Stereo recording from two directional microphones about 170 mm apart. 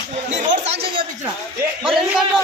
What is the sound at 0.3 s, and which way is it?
Speech, 40° right (ahead or behind).